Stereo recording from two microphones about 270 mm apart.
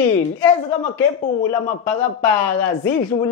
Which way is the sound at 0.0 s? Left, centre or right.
Centre.